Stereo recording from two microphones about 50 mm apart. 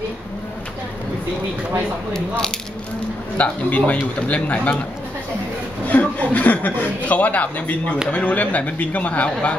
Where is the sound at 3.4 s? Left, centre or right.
Left.